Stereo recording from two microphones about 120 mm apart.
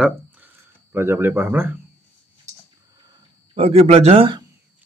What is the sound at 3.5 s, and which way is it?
Speech, 55° right (ahead or behind).